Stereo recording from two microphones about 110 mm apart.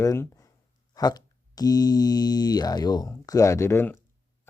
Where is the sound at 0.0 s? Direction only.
25° left (ahead or behind).